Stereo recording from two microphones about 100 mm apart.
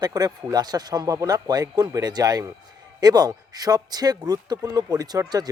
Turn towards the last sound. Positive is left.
turn(degrees=-40)  # may be behind; listen again after turning